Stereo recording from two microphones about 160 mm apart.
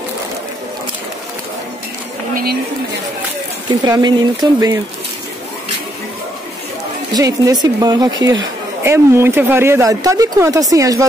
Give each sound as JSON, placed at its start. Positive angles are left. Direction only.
{"t": 3.8, "sound": "a woman's voice", "side_deg": -25}
{"t": 7.2, "sound": "a woman's voice", "side_deg": -20}